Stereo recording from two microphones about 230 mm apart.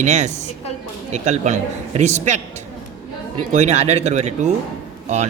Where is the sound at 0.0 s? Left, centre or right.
Right.